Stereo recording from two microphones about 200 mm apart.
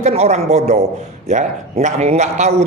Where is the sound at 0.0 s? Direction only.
35° right (ahead or behind).